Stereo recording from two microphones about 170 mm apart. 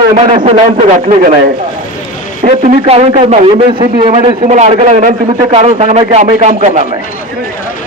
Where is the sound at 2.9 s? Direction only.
35° right (ahead or behind).